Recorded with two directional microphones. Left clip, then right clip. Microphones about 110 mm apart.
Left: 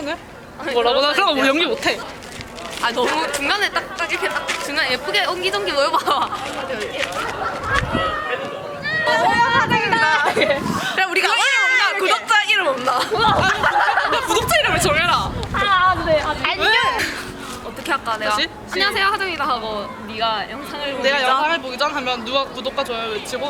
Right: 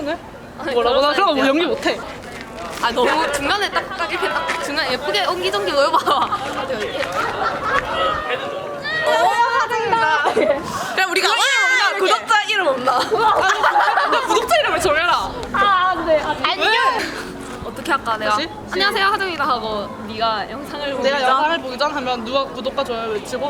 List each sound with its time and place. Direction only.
0.8 s speech: 15° left (ahead or behind)
2.8 s a woman's voice: centre (ahead or behind)
9.0 s a sound: 15° left (ahead or behind)
9.9 s chatter: 15° left (ahead or behind)
10.4 s speech: 25° left (ahead or behind)
10.9 s a woman's voice: 15° right (ahead or behind)
11.8 s speech: centre (ahead or behind)
13.1 s speech: 20° left (ahead or behind)
13.5 s a sound: 15° right (ahead or behind)
13.9 s a woman's voice: 10° left (ahead or behind)